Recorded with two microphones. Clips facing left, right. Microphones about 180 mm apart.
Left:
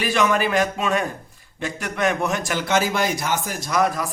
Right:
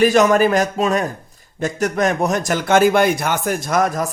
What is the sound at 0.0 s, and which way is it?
A man's voice, 45° right (ahead or behind).